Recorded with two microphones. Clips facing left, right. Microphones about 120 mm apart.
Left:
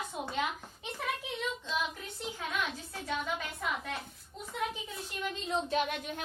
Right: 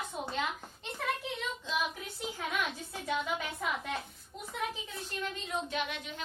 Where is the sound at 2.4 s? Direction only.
5° right (ahead or behind).